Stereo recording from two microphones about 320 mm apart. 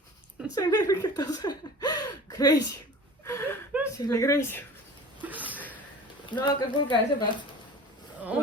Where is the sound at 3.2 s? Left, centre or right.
Centre.